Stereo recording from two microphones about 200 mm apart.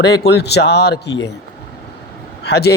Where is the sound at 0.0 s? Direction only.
55° left (ahead or behind).